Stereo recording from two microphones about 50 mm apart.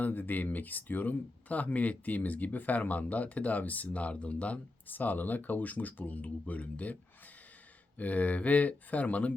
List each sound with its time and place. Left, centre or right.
0.0 s speech: left